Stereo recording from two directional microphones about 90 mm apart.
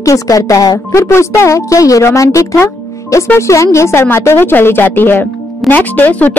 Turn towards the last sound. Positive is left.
turn(degrees=20)  # may be behind; listen again after turning